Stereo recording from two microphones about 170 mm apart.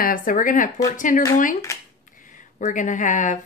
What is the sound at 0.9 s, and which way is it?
Speech, 50° left (ahead or behind).